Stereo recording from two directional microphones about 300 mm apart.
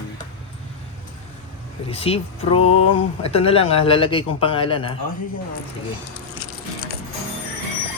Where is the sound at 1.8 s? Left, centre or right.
Centre.